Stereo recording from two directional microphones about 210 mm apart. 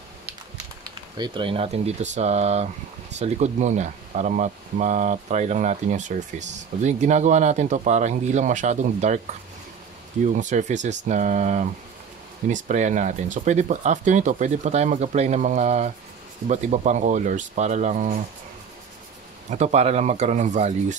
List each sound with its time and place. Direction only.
1.1 s speech: 20° right (ahead or behind)
10.2 s speech: 35° right (ahead or behind)
19.5 s speech: 35° right (ahead or behind)